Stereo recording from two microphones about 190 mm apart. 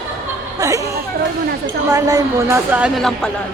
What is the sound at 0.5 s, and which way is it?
A woman's voice, 15° right (ahead or behind).